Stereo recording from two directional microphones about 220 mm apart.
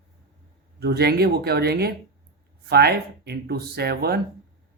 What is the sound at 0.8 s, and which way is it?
Speech, 45° right (ahead or behind).